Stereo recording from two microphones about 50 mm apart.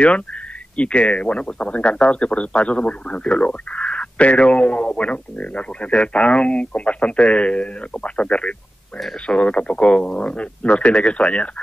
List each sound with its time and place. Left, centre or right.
0.7 s speech: left